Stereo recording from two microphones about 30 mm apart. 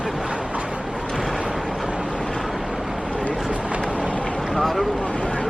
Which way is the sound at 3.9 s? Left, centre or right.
Right.